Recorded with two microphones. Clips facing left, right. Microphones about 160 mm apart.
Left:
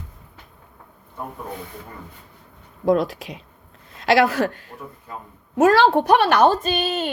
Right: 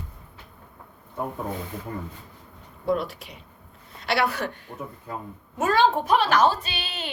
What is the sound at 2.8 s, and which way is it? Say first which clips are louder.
A woman's voice: left 7 dB; 90° left.